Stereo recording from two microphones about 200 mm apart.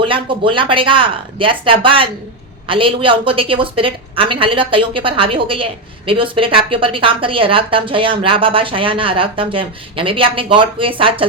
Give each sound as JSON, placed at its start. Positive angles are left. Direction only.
{"t": 0.0, "sound": "speech", "side_deg": -25}